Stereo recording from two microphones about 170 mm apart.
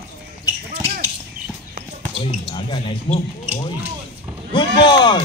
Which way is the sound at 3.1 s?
30° left (ahead or behind).